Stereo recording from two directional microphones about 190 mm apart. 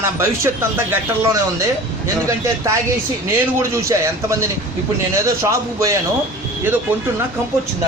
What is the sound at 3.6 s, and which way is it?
A man's voice, 15° right (ahead or behind).